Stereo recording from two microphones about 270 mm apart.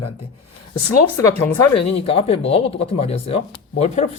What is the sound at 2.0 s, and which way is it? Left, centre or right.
Speech, left.